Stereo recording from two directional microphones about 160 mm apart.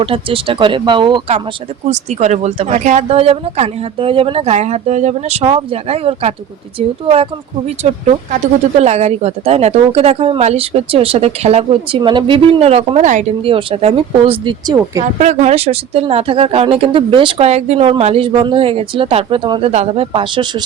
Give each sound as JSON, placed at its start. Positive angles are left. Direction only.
{"t": 0.0, "sound": "speech", "side_deg": -35}
{"t": 1.9, "sound": "speech", "side_deg": -45}
{"t": 13.4, "sound": "speech", "side_deg": -35}
{"t": 15.0, "sound": "speech", "side_deg": -45}